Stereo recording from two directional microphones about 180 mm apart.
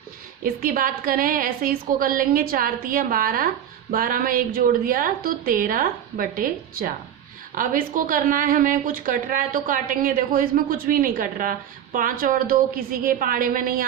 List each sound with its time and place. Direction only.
0.4 s a woman's voice: 50° right (ahead or behind)